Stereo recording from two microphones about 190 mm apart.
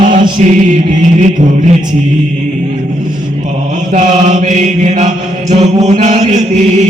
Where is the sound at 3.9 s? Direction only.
40° right (ahead or behind).